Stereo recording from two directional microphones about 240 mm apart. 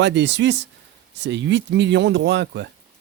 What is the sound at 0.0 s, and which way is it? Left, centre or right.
Speech, right.